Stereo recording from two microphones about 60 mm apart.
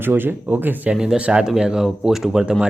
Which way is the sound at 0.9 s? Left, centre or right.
Centre.